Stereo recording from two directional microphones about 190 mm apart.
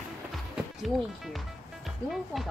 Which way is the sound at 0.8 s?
Centre (ahead or behind).